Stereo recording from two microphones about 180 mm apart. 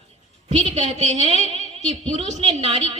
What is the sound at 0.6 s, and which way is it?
A woman's voice, 40° right (ahead or behind).